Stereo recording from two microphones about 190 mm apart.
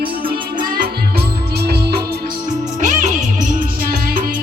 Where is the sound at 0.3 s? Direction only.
45° right (ahead or behind).